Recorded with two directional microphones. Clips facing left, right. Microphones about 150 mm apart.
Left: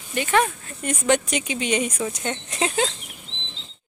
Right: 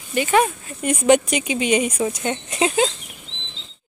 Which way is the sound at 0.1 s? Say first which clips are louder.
Right 3 dB; 10° right (ahead or behind).